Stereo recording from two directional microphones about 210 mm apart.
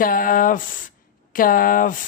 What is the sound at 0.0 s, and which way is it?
Speech, 40° left (ahead or behind).